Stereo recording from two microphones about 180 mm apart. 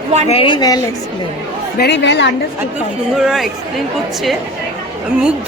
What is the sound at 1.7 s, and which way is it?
Speech, 75° left (ahead or behind).